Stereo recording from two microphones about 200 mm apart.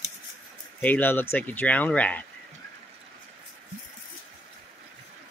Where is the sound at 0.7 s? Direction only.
10° left (ahead or behind).